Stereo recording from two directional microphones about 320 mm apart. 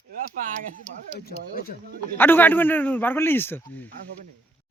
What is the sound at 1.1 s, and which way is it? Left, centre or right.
Speech, left.